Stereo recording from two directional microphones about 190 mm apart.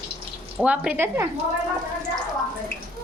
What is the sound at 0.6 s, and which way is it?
Speech, 5° right (ahead or behind).